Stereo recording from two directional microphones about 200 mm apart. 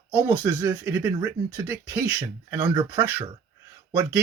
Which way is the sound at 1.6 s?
10° right (ahead or behind).